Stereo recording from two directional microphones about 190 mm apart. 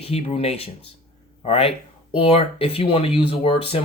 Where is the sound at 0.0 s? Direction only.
30° left (ahead or behind).